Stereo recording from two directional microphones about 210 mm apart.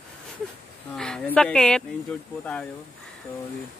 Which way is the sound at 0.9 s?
5° left (ahead or behind).